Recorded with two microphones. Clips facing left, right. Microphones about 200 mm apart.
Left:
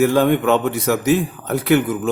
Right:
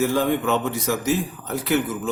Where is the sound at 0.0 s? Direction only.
65° left (ahead or behind).